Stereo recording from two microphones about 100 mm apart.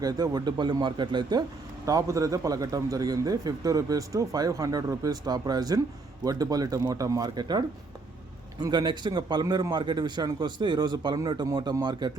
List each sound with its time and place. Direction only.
0.0 s a man's voice: 40° right (ahead or behind)
1.8 s a man's voice: 35° right (ahead or behind)